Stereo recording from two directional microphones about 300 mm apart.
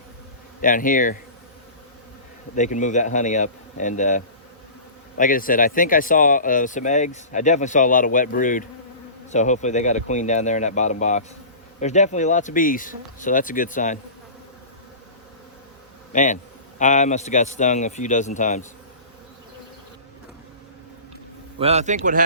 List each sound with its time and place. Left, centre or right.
0.6 s speech: left
2.6 s speech: left
16.1 s speech: left
21.6 s a man's voice: right